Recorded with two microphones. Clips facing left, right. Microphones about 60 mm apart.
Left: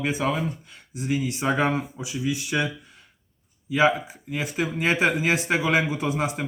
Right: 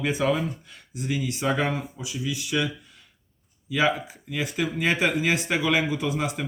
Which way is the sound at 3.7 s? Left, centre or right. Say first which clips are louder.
Left 3 dB; left.